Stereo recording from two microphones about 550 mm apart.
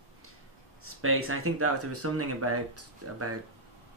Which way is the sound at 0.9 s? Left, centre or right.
Right.